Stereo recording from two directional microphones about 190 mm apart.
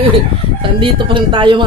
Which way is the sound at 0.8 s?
25° right (ahead or behind).